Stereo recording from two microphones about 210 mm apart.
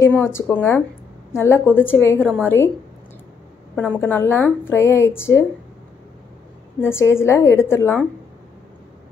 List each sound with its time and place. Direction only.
0.0 s a woman's voice: 10° left (ahead or behind)
2.1 s a woman's voice: 5° right (ahead or behind)
2.4 s a woman's voice: 10° left (ahead or behind)
3.7 s a woman's voice: 5° left (ahead or behind)
6.8 s a woman's voice: 10° left (ahead or behind)